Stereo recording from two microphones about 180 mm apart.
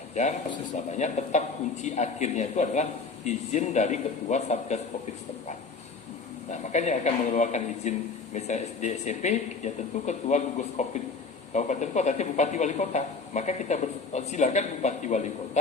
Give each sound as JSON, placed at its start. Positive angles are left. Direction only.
{"t": 0.1, "sound": "a man's voice", "side_deg": 40}
{"t": 6.5, "sound": "a man's voice", "side_deg": 40}